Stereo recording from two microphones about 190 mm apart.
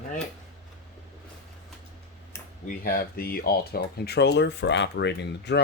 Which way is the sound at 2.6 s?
50° left (ahead or behind).